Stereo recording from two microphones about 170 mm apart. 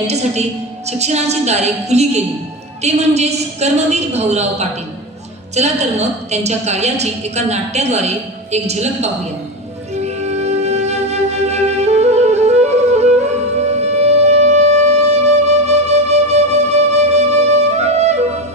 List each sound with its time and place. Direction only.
0.0 s a woman's voice: 40° right (ahead or behind)
10.0 s music: 40° right (ahead or behind)
14.0 s wind instrument: 40° right (ahead or behind)